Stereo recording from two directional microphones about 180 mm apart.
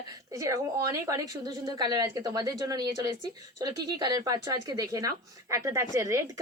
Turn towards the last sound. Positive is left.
turn(degrees=-15)  # may be behind; listen again after turning